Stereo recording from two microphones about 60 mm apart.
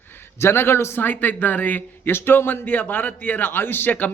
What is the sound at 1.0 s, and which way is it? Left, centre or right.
A man's voice, left.